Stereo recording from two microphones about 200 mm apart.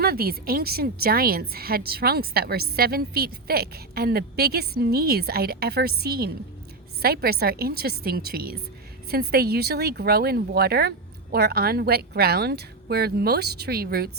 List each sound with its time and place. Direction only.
0.0 s a woman's voice: 50° right (ahead or behind)